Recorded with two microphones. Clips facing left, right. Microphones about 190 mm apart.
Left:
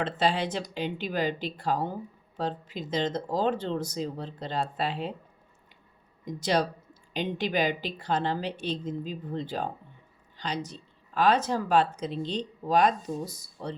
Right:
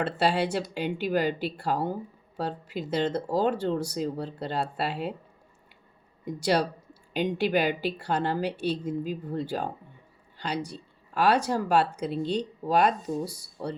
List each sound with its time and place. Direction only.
0.0 s speech: 10° right (ahead or behind)
6.2 s speech: 10° right (ahead or behind)